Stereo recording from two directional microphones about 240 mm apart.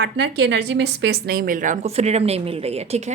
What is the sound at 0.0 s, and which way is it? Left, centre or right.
A woman's voice, right.